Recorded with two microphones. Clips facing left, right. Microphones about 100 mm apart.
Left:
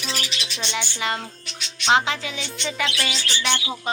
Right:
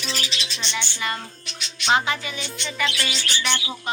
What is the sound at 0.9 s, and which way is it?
Music, 80° left.